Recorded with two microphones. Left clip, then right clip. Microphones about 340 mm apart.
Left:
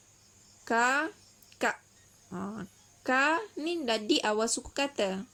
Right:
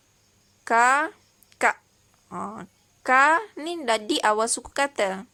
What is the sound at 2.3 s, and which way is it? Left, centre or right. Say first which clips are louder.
Speech: right 7 dB; right.